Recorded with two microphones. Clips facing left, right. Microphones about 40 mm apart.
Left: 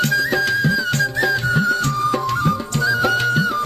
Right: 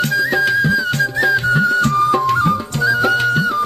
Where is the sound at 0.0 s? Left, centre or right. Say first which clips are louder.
Right 2 dB; centre.